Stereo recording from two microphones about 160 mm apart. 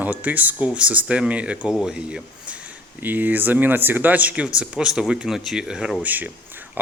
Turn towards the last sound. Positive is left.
turn(degrees=-10)  # may be behind; listen again after turning